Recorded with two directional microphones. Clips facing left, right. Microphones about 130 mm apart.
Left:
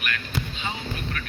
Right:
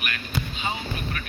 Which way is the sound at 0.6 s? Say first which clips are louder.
Right 2 dB; 15° right (ahead or behind).